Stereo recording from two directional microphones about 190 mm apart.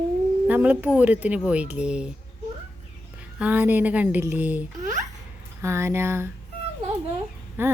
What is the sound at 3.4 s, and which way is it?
Speech, 10° right (ahead or behind).